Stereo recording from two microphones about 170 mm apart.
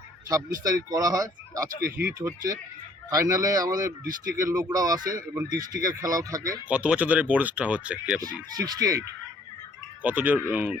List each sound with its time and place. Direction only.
0.3 s speech: 20° right (ahead or behind)
1.8 s speech: 65° right (ahead or behind)
2.1 s speech: 20° right (ahead or behind)
4.0 s speech: 60° right (ahead or behind)
4.4 s speech: 20° right (ahead or behind)
6.7 s speech: 5° right (ahead or behind)
8.5 s speech: 20° right (ahead or behind)
10.0 s speech: 10° right (ahead or behind)